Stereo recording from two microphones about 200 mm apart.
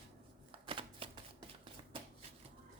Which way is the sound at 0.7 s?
25° right (ahead or behind).